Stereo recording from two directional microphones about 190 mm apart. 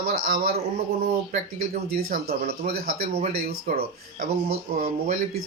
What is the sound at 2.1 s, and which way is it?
Speech, 55° right (ahead or behind).